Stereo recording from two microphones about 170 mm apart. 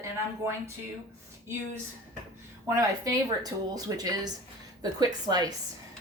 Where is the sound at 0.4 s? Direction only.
15° right (ahead or behind).